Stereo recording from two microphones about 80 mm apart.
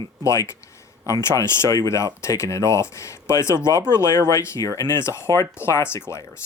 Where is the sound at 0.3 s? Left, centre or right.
Left.